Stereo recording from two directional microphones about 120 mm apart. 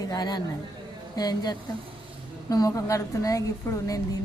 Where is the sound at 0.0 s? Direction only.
35° left (ahead or behind).